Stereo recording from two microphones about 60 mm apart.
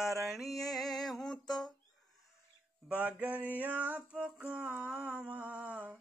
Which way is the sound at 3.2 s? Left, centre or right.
Right.